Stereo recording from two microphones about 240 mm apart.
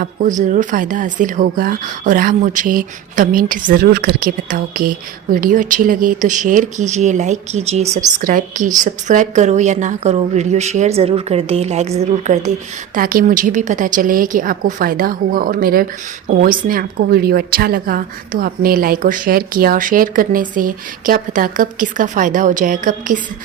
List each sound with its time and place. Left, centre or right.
0.0 s a woman's voice: right